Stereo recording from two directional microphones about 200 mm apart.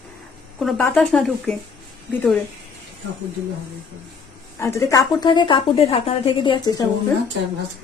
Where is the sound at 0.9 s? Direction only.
5° left (ahead or behind).